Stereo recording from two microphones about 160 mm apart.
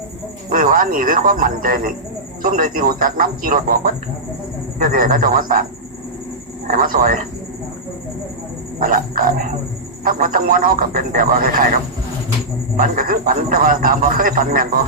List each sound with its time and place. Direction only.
0.5 s a man's voice: 60° right (ahead or behind)
6.7 s a man's voice: 60° right (ahead or behind)
8.8 s a man's voice: 60° right (ahead or behind)